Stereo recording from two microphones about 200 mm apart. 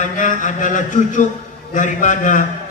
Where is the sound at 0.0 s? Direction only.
40° left (ahead or behind).